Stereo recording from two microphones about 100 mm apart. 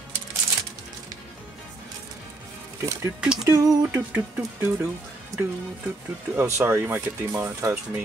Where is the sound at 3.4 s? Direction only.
25° right (ahead or behind).